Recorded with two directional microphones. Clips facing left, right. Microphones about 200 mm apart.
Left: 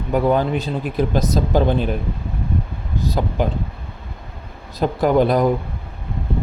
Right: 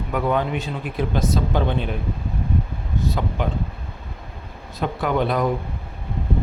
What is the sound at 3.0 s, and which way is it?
Speech, 35° left (ahead or behind).